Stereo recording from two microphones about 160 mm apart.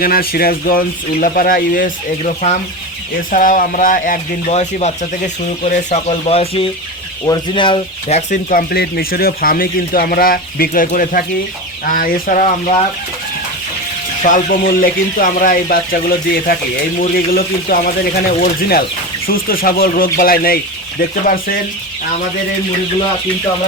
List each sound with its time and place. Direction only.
0.0 s speech: 65° left (ahead or behind); by 8.2 s 30° left (ahead or behind)
8.3 s speech: 50° left (ahead or behind)
8.7 s speech: 75° left (ahead or behind)
12.4 s speech: 45° left (ahead or behind)
14.3 s speech: 60° left (ahead or behind)